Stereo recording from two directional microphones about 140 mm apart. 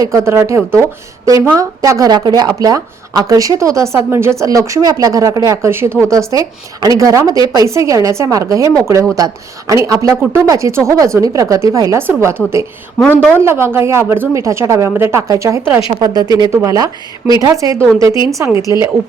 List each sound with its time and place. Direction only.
0.0 s speech: 20° right (ahead or behind)
13.4 s speech: 15° right (ahead or behind)